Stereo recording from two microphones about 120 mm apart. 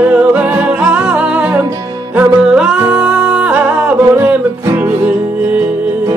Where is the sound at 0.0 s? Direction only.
10° right (ahead or behind).